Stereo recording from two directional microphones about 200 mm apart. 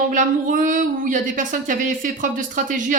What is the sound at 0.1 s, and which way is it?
Speech, 40° right (ahead or behind).